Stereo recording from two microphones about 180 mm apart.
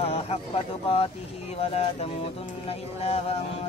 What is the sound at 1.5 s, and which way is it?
Speech, 35° left (ahead or behind).